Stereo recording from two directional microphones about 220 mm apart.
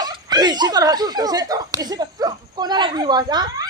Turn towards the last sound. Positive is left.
turn(degrees=-20)  # may be behind; listen again after turning